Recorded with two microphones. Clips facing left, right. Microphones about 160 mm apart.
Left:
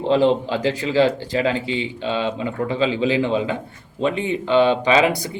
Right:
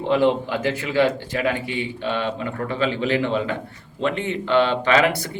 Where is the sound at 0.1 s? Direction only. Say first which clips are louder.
Left 2 dB; 25° left (ahead or behind).